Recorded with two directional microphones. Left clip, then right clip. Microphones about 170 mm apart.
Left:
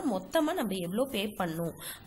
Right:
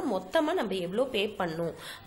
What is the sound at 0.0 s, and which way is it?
A woman's voice, 25° left (ahead or behind).